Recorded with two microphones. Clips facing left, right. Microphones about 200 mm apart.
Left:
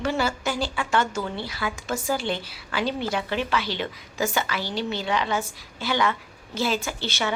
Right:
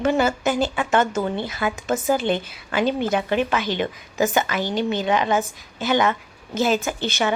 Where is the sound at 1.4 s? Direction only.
20° right (ahead or behind).